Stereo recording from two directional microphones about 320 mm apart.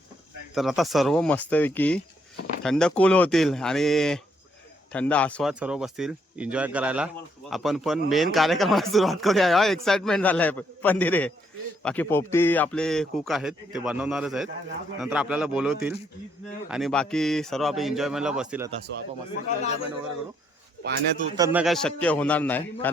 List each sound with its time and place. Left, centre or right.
0.5 s speech: centre
19.5 s a man's voice: left
21.2 s speech: centre